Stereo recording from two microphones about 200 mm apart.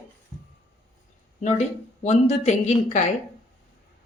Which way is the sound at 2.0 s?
30° left (ahead or behind).